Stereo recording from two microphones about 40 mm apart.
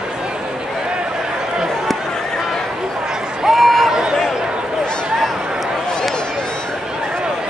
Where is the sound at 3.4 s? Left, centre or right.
Centre.